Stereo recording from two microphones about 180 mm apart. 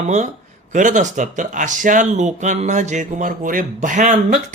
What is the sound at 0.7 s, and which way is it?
Speech, 45° right (ahead or behind).